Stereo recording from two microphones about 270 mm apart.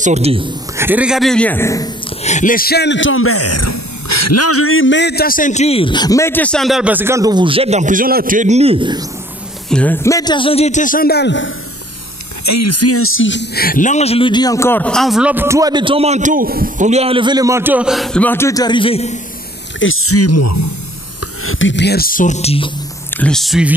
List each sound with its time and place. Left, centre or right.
0.0 s speech: right
0.7 s speech: centre
2.2 s speech: left; by 9.0 s centre
9.7 s speech: centre; by 11.5 s left
12.4 s speech: left
19.8 s speech: left
21.5 s speech: left
23.1 s speech: centre